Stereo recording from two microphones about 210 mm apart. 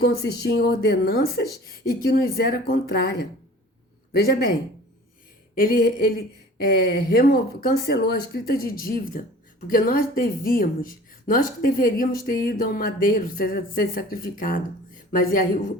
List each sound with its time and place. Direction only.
0.0 s speech: 50° left (ahead or behind)
5.5 s speech: 45° left (ahead or behind)